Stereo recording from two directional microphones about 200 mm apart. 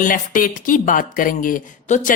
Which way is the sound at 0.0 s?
45° left (ahead or behind).